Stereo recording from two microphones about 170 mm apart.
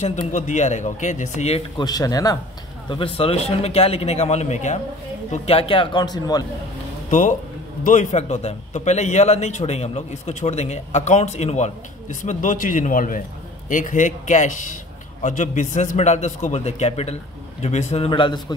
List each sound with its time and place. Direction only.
0.0 s a man's voice: 45° left (ahead or behind)
1.8 s speech: 20° left (ahead or behind)
2.9 s a man's voice: 35° left (ahead or behind)
7.1 s a man's voice: 50° left (ahead or behind); by 18.4 s 30° left (ahead or behind)